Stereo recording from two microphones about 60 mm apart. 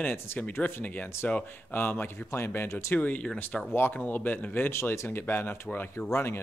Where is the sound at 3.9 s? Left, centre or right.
Left.